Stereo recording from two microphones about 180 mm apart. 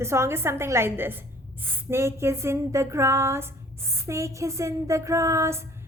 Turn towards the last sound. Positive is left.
turn(degrees=-15)  # may be behind; listen again after turning